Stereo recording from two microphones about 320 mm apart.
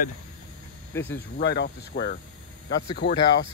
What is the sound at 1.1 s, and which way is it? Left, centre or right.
Speech, left.